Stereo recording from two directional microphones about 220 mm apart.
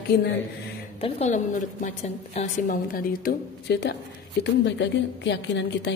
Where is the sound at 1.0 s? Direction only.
30° left (ahead or behind).